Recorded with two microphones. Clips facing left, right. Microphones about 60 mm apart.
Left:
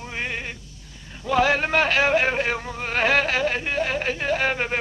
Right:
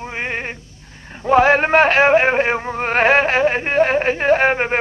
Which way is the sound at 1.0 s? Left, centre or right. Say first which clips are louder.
Right 7 dB; right.